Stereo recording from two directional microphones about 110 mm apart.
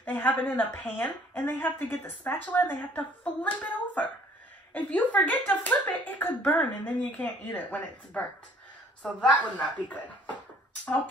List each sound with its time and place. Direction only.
0.0 s a woman's voice: 15° left (ahead or behind)
9.3 s a woman's voice: 15° left (ahead or behind)